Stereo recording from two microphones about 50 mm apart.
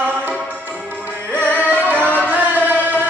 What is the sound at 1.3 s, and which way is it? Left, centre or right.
Music, left.